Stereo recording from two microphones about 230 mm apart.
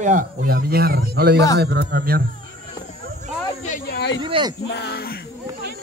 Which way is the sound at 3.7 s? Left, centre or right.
Left.